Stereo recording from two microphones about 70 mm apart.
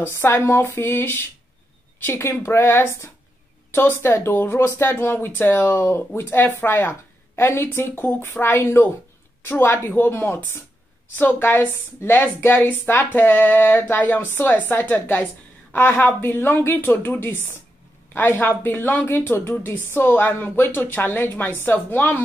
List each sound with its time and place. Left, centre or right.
0.0 s a woman's voice: left